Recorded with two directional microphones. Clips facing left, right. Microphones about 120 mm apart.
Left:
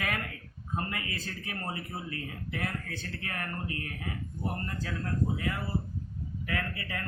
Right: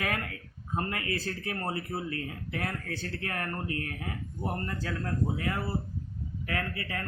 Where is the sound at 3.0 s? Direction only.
40° right (ahead or behind).